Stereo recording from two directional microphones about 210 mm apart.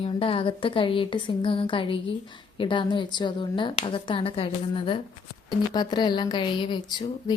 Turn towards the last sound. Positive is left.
turn(degrees=20)  # may be behind; listen again after turning